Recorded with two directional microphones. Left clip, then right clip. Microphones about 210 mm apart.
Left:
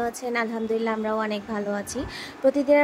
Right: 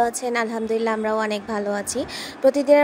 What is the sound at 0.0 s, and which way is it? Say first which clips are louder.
A woman's voice: right 5 dB; 25° right (ahead or behind).